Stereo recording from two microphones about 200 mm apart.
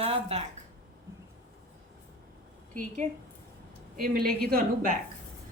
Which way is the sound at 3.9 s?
45° right (ahead or behind).